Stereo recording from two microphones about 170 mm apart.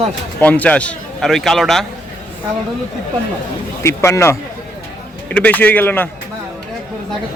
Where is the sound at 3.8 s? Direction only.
15° left (ahead or behind).